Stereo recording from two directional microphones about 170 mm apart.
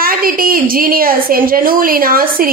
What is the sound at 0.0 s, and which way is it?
A woman's voice, 60° right (ahead or behind).